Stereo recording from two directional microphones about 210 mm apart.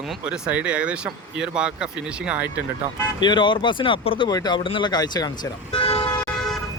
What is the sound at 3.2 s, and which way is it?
Speech, 20° left (ahead or behind).